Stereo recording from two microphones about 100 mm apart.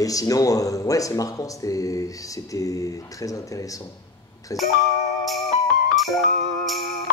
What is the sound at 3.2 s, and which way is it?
A man's voice, 35° left (ahead or behind).